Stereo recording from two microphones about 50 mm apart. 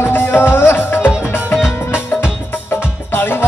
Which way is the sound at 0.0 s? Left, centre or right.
Left.